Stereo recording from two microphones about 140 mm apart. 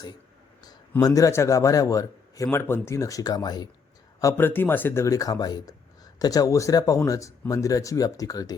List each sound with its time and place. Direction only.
1.0 s a man's voice: 25° left (ahead or behind)
4.2 s a man's voice: 20° left (ahead or behind)